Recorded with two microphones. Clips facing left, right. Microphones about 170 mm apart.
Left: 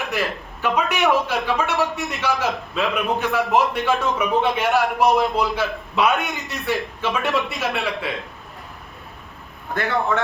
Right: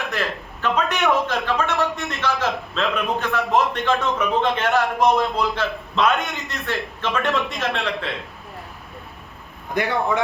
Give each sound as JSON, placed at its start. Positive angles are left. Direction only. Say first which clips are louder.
{"t": 0.1, "sound": "a man's voice", "louder": "left 1 dB", "side_deg": 10}
{"t": 9.7, "sound": "a man's voice", "louder": "right 1 dB", "side_deg": -15}